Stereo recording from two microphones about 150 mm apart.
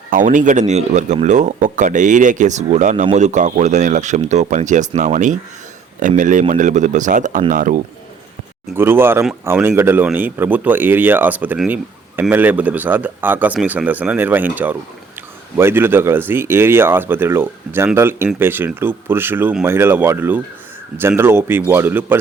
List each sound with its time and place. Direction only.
0.1 s speech: 60° right (ahead or behind)
8.7 s speech: 15° right (ahead or behind)